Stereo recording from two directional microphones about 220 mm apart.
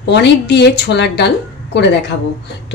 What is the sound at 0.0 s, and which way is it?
Speech, 50° left (ahead or behind).